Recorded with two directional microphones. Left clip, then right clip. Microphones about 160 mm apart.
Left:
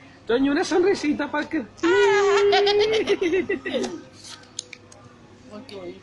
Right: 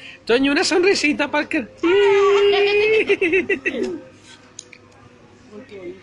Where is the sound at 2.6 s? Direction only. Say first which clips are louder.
Right 2 dB; 20° left (ahead or behind).